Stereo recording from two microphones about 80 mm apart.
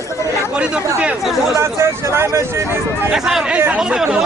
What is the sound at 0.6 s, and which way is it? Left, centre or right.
Speech, centre.